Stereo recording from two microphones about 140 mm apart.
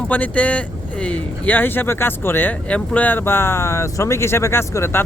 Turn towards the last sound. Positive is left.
turn(degrees=15)  # may be behind; listen again after turning